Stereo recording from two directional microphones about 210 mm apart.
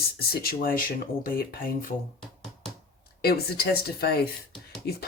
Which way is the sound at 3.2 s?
45° left (ahead or behind).